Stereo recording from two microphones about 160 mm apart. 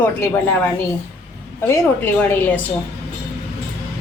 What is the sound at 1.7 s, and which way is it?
Speech, 15° left (ahead or behind).